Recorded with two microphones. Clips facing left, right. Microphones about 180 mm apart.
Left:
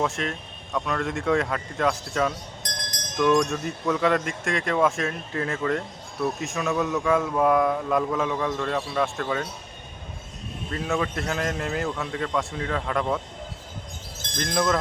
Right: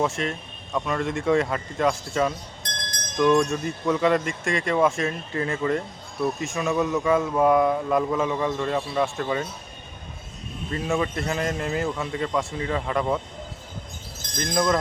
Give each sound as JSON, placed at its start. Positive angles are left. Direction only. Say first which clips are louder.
{"t": 0.0, "sound": "speech", "louder": "right 2 dB", "side_deg": 0}
{"t": 2.6, "sound": "music", "louder": "right 1 dB", "side_deg": 15}
{"t": 3.2, "sound": "speech", "louder": "right 1 dB", "side_deg": 0}
{"t": 10.7, "sound": "speech", "louder": "right 2 dB", "side_deg": 0}
{"t": 14.3, "sound": "speech", "louder": "right 1 dB", "side_deg": 0}